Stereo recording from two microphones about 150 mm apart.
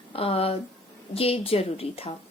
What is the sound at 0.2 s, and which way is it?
A woman's voice, 40° left (ahead or behind).